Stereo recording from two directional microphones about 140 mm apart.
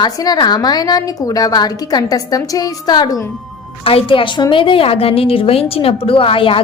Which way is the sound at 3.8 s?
40° left (ahead or behind).